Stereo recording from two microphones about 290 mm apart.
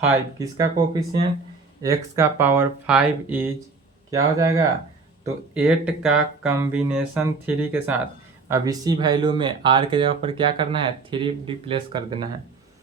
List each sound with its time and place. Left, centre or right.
0.1 s speech: centre